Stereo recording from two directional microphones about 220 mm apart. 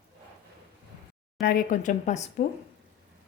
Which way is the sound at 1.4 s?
40° left (ahead or behind).